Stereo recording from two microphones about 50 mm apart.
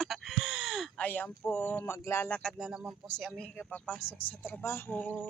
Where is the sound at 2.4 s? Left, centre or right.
Centre.